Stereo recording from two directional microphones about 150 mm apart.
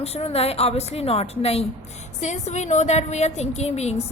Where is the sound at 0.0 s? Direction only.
45° left (ahead or behind).